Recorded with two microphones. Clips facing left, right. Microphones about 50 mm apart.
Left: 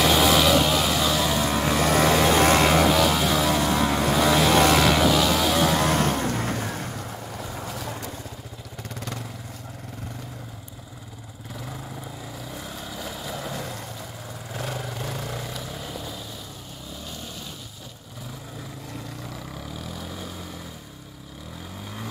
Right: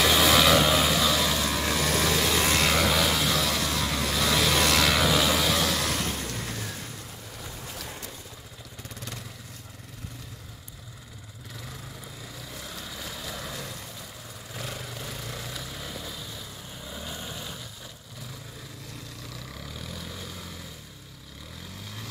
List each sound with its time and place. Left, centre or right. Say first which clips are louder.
0.0 s vehicle: left 2 dB; centre
0.5 s vehicle: left 1 dB; centre
1.4 s vehicle: left 5 dB; left
2.6 s vehicle: left 5 dB; left
2.9 s vehicle: left 4 dB; centre
5.5 s vehicle: left 5 dB; centre
5.8 s vehicle: left 8 dB; left
12.5 s vehicle: left 2 dB; centre
13.5 s vehicle: left 5 dB; left
15.3 s vehicle: left 4 dB; centre
16.9 s vehicle: right 1 dB; centre
19.5 s vehicle: left 4 dB; centre